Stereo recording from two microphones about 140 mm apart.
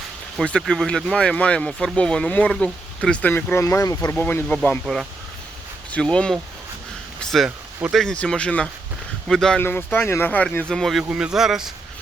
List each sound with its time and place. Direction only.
0.3 s speech: 5° left (ahead or behind); by 4.1 s 25° left (ahead or behind)
4.1 s speech: 15° left (ahead or behind)
5.9 s speech: 10° left (ahead or behind)
9.6 s speech: 15° left (ahead or behind); by 11.7 s 5° right (ahead or behind)